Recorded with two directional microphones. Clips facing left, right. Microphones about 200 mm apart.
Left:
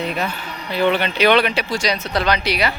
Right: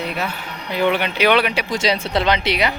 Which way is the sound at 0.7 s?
15° right (ahead or behind).